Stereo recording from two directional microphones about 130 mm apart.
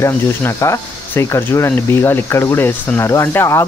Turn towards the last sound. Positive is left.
turn(degrees=20)  # may be behind; listen again after turning